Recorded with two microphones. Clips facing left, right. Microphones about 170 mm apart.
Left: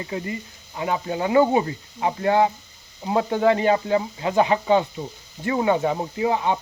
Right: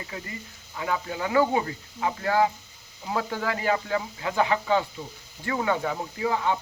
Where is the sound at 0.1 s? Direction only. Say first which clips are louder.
Left 9 dB; 25° left (ahead or behind).